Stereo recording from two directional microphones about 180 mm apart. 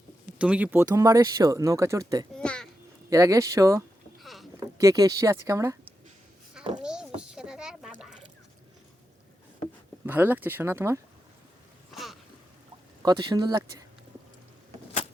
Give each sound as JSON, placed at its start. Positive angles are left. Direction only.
{"t": 0.3, "sound": "speech", "side_deg": -5}
{"t": 2.4, "sound": "a sound", "side_deg": 5}
{"t": 3.1, "sound": "speech", "side_deg": -20}
{"t": 4.2, "sound": "rowboat", "side_deg": 0}
{"t": 4.8, "sound": "speech", "side_deg": -20}
{"t": 6.8, "sound": "a sound", "side_deg": -5}
{"t": 10.1, "sound": "speech", "side_deg": -10}
{"t": 13.0, "sound": "speech", "side_deg": -25}